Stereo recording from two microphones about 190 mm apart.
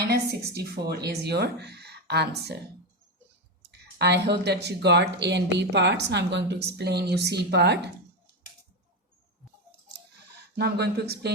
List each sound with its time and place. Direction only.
0.1 s speech: 60° right (ahead or behind)
3.6 s speech: 60° right (ahead or behind)
10.5 s speech: 60° right (ahead or behind)